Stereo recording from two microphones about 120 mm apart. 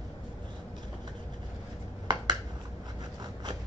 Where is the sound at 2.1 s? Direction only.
40° right (ahead or behind).